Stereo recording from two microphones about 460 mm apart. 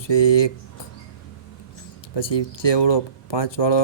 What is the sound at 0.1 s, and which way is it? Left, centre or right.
Speech, left.